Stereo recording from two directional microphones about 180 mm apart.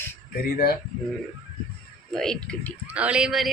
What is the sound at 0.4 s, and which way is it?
Speech, 60° left (ahead or behind).